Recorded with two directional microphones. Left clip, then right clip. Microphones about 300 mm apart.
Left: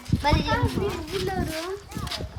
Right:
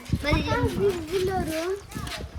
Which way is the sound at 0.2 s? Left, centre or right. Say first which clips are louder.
Left 3 dB; left.